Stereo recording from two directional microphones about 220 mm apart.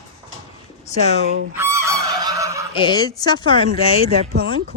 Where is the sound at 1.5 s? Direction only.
15° right (ahead or behind).